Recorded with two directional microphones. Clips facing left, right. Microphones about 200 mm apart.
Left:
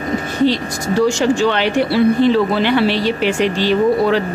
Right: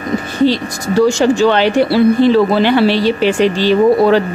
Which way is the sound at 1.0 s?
35° right (ahead or behind).